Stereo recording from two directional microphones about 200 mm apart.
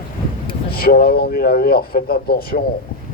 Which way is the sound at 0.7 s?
50° left (ahead or behind).